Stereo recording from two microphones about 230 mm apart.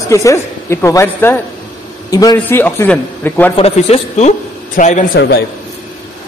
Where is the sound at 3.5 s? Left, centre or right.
Left.